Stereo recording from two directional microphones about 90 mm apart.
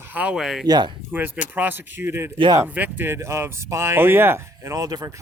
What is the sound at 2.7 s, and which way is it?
Speech, 20° right (ahead or behind).